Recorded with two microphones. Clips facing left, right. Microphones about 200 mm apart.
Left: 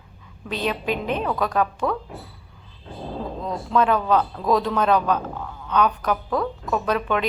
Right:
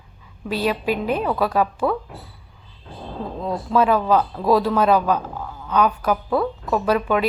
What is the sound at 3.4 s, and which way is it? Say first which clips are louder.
A man's voice: right 3 dB; 5° right (ahead or behind).